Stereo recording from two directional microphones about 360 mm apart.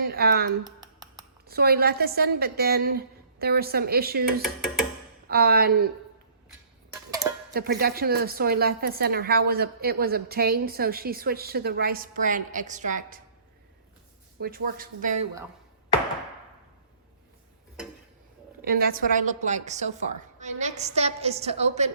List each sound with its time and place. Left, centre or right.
0.1 s a woman's voice: right
4.4 s a sound: centre
5.3 s a woman's voice: right
6.9 s music: centre
7.5 s a woman's voice: right
14.4 s a woman's voice: right
18.6 s a woman's voice: right